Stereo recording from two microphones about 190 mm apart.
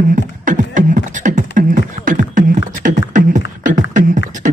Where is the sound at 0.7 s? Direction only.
40° right (ahead or behind).